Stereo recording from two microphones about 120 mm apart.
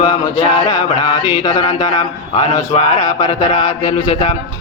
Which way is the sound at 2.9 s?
75° left (ahead or behind).